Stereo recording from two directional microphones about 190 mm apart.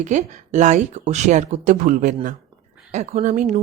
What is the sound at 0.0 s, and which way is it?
A woman's voice, 40° right (ahead or behind).